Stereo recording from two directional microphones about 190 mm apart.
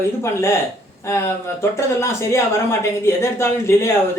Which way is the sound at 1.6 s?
15° left (ahead or behind).